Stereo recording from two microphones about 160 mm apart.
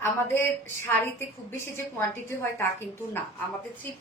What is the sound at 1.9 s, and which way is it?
Speech, 15° left (ahead or behind).